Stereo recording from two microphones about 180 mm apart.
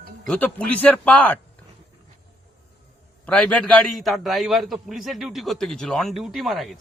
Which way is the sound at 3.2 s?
5° left (ahead or behind).